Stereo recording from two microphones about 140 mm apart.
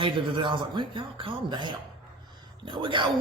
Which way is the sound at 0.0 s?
35° right (ahead or behind).